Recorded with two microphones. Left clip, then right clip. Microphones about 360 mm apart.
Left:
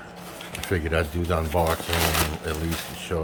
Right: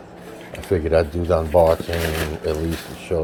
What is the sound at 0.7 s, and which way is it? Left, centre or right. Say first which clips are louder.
Speech: right 8 dB; centre.